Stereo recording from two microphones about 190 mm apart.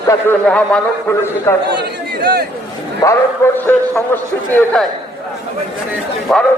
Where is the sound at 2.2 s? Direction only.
50° right (ahead or behind).